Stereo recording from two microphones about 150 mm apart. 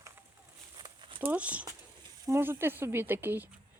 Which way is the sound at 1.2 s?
10° right (ahead or behind).